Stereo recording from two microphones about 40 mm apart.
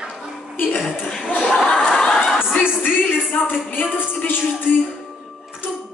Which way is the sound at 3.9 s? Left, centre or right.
Left.